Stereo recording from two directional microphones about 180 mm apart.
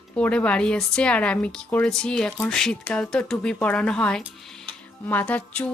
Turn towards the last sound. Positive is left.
turn(degrees=10)  # may be behind; listen again after turning